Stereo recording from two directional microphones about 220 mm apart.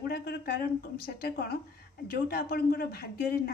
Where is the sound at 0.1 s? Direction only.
45° left (ahead or behind).